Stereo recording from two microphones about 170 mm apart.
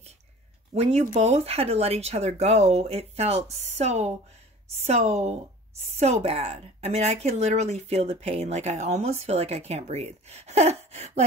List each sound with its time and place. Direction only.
0.7 s speech: 40° right (ahead or behind)